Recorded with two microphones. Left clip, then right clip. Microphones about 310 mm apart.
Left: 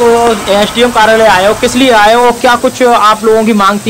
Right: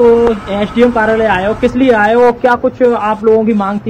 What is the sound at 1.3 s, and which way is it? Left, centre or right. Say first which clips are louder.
Speech: left 5 dB; centre.